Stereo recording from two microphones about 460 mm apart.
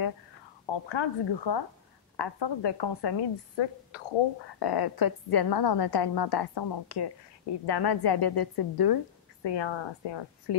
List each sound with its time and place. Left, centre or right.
0.7 s speech: left
4.6 s a woman's voice: left